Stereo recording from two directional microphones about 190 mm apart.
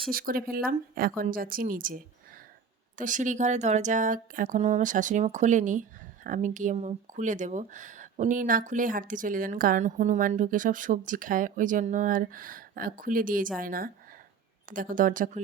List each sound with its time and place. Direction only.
0.1 s speech: 50° right (ahead or behind)
3.0 s speech: 40° right (ahead or behind)